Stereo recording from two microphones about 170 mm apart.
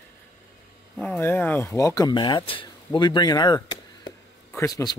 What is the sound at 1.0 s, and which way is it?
Speech, 10° left (ahead or behind).